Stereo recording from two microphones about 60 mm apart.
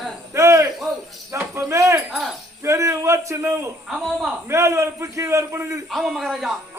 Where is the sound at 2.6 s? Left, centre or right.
Right.